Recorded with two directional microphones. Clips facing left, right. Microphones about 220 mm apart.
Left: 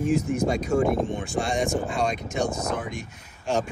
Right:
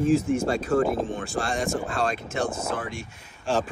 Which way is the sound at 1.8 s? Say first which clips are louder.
Left 1 dB; 15° left (ahead or behind).